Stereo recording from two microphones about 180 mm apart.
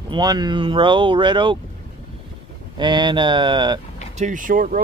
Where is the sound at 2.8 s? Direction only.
25° right (ahead or behind).